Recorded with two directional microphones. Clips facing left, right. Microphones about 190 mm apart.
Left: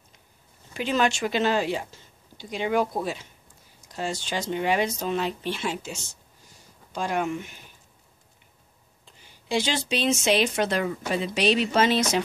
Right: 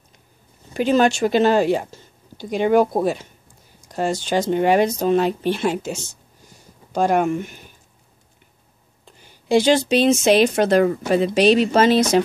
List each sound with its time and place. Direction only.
0.7 s speech: 40° right (ahead or behind)
9.0 s speech: 50° right (ahead or behind)